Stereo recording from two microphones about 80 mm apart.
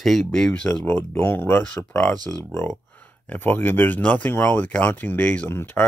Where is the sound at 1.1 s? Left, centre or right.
Left.